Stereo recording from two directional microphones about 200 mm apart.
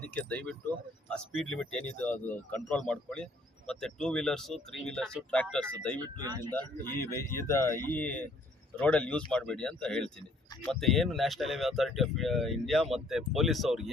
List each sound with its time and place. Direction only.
0.1 s speech: 5° left (ahead or behind)
6.1 s speech: 20° right (ahead or behind)
7.0 s speech: 15° left (ahead or behind)